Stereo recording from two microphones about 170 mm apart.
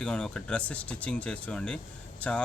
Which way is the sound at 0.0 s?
5° left (ahead or behind).